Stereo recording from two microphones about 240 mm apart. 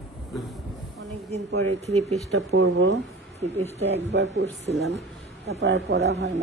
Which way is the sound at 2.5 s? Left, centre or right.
Right.